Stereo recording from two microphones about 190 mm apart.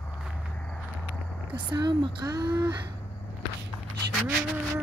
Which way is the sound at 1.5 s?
20° right (ahead or behind).